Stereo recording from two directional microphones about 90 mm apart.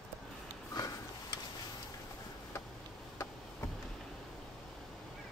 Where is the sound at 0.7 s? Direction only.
45° left (ahead or behind).